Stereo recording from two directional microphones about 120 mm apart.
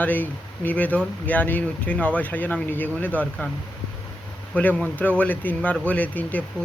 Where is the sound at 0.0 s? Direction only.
15° left (ahead or behind).